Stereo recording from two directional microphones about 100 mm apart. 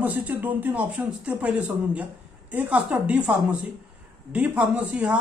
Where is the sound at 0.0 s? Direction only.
20° right (ahead or behind).